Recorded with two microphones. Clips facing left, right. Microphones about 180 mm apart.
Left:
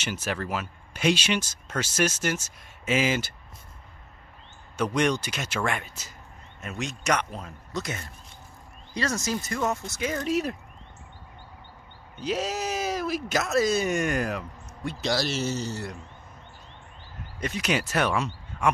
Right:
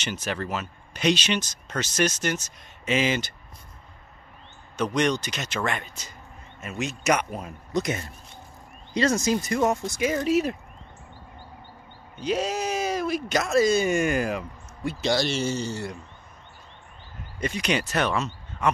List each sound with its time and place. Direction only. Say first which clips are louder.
0.0 s speech: right 1 dB; 5° left (ahead or behind)
4.7 s speech: right 1 dB; 10° left (ahead or behind)
12.2 s speech: right 3 dB; centre (ahead or behind)
17.4 s speech: right 1 dB; centre (ahead or behind)